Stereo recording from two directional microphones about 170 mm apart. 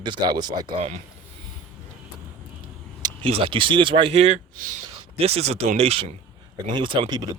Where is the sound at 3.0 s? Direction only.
25° right (ahead or behind).